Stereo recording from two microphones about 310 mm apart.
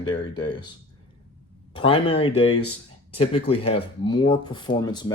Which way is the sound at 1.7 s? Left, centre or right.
Centre.